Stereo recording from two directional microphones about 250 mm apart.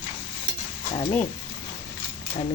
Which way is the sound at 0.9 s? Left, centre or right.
Left.